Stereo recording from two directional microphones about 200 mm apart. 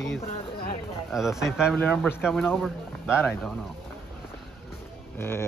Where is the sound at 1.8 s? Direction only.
10° left (ahead or behind).